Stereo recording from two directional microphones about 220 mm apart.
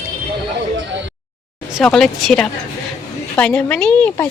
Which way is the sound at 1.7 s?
5° left (ahead or behind).